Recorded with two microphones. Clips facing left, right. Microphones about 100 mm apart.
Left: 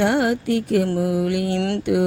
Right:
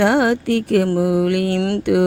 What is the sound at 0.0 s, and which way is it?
Speech, 65° right (ahead or behind).